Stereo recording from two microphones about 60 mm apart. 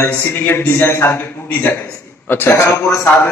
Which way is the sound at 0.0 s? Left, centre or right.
Left.